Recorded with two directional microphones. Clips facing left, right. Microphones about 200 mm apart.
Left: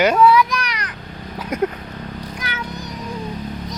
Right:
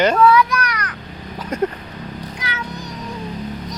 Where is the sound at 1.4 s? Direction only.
10° left (ahead or behind).